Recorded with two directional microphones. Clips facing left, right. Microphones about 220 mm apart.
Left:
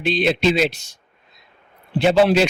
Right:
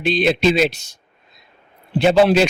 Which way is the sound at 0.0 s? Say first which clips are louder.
Right 2 dB; 45° right (ahead or behind).